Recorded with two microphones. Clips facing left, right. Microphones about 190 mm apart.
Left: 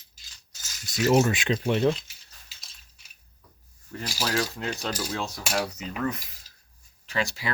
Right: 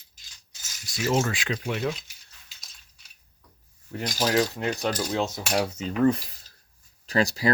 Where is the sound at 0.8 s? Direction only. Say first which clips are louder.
Left 4 dB; 20° left (ahead or behind).